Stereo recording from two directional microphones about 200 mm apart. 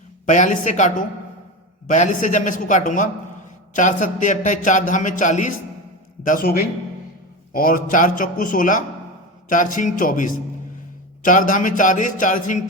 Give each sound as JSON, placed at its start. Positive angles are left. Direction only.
{"t": 0.3, "sound": "a man's voice", "side_deg": 35}